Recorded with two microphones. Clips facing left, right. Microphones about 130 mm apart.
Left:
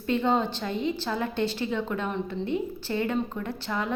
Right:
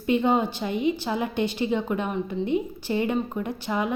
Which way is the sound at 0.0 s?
15° right (ahead or behind).